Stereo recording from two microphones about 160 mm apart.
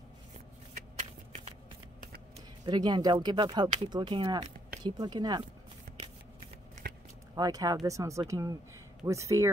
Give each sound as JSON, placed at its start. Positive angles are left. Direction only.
{"t": 2.6, "sound": "speech", "side_deg": -25}
{"t": 7.3, "sound": "speech", "side_deg": -25}